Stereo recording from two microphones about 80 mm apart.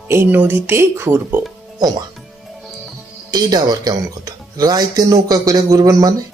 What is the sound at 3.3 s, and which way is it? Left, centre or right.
Speech, right.